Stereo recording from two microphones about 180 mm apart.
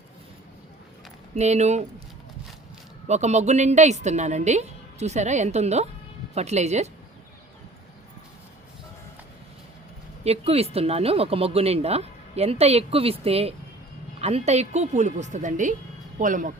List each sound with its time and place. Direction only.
1.4 s speech: 40° right (ahead or behind)
3.1 s speech: 40° right (ahead or behind)
10.2 s speech: 35° right (ahead or behind)